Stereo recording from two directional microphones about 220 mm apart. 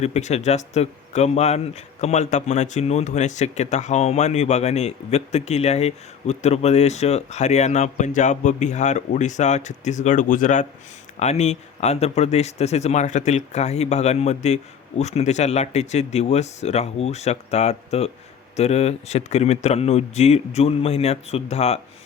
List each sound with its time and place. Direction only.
0.0 s speech: 30° left (ahead or behind)